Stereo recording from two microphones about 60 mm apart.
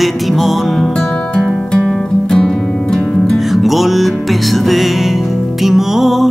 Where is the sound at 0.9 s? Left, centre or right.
Centre.